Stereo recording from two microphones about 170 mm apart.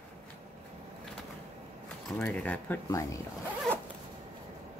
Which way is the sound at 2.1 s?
10° left (ahead or behind).